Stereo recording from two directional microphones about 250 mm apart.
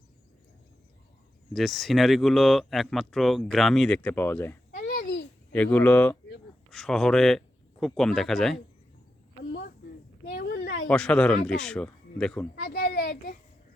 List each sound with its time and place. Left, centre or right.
1.5 s speech: centre
4.7 s babbling: left
5.5 s speech: centre
9.4 s cricket: left
10.3 s a sound: left
10.8 s speech: centre
12.6 s children playing: left